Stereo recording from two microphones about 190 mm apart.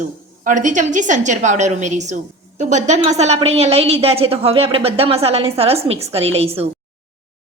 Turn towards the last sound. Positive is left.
turn(degrees=-30)  # may be behind; listen again after turning